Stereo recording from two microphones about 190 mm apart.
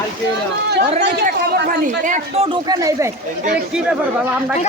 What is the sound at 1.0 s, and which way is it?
Speech, 60° right (ahead or behind).